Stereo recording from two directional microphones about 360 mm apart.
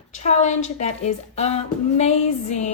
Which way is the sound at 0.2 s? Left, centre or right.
Centre.